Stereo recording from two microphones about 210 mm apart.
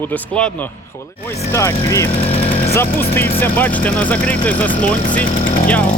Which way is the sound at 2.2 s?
30° left (ahead or behind).